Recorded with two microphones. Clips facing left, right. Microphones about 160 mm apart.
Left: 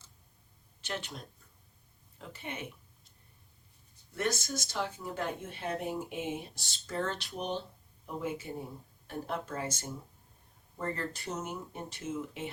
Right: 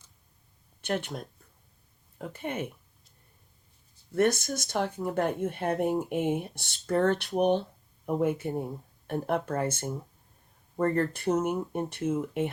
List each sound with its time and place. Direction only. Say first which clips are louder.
0.8 s speech: right 8 dB; 55° right (ahead or behind)
4.1 s speech: right 8 dB; 55° right (ahead or behind)